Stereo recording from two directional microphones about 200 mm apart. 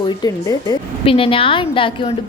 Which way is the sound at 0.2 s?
15° left (ahead or behind).